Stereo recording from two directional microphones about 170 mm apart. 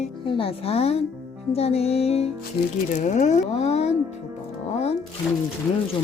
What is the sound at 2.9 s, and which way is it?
Speech, 45° left (ahead or behind).